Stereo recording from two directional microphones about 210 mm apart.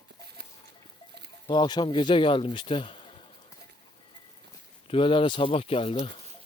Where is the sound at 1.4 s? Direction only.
20° left (ahead or behind).